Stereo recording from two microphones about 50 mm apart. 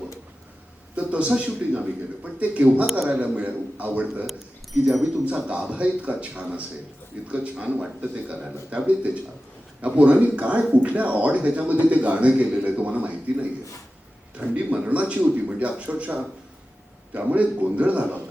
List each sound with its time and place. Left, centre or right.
0.9 s a man's voice: right
4.9 s speech: centre
5.2 s speech: right
9.8 s speech: right